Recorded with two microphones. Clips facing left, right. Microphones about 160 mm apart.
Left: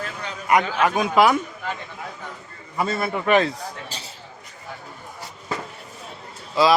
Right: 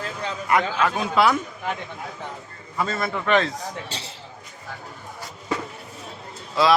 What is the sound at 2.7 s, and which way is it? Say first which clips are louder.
Speech: left 2 dB; 10° left (ahead or behind).